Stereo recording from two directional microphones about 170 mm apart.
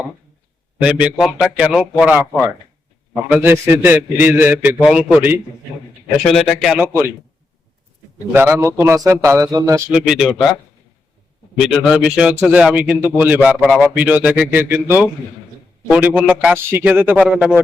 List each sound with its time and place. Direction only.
0.8 s a man's voice: 5° right (ahead or behind)
8.3 s speech: 15° right (ahead or behind)
9.9 s a man's voice: 5° right (ahead or behind)
11.6 s speech: centre (ahead or behind)